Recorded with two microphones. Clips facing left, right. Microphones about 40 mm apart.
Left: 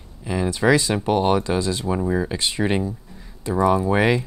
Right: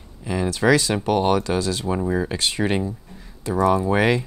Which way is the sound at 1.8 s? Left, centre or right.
Centre.